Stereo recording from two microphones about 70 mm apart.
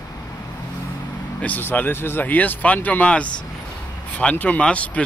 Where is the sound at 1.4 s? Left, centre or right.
Left.